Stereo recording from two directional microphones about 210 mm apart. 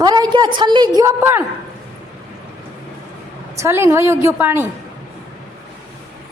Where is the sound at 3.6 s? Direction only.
15° right (ahead or behind).